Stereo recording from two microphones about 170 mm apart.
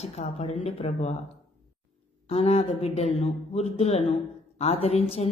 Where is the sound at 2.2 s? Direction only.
40° left (ahead or behind).